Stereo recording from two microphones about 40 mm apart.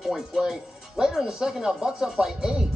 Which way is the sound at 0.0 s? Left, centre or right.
Centre.